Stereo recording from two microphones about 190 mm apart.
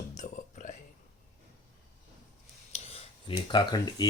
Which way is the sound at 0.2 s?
40° left (ahead or behind).